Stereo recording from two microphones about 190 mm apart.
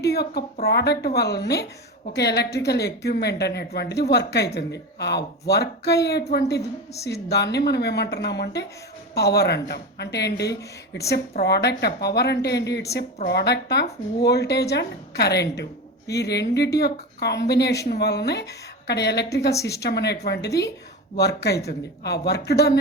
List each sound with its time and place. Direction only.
0.0 s speech: 60° left (ahead or behind)